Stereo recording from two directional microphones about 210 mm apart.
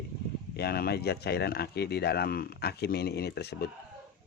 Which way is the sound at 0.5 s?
50° left (ahead or behind).